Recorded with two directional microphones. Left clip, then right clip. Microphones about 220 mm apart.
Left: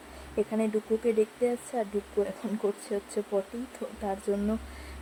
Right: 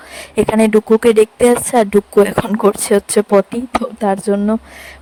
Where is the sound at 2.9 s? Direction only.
50° right (ahead or behind).